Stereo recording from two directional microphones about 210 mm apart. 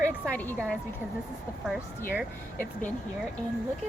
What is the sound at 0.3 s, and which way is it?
Speech, 5° left (ahead or behind).